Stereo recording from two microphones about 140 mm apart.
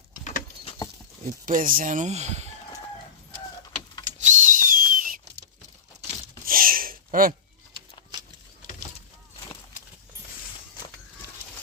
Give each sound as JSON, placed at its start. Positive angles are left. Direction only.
{"t": 1.2, "sound": "speech", "side_deg": -70}
{"t": 4.2, "sound": "whistle", "side_deg": -65}
{"t": 6.4, "sound": "a sound", "side_deg": -90}